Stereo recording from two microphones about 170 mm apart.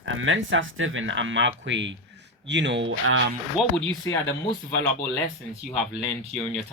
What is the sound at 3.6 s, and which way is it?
Speech, 5° right (ahead or behind).